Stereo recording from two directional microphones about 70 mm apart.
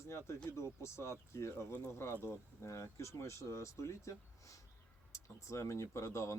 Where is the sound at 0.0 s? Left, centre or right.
Left.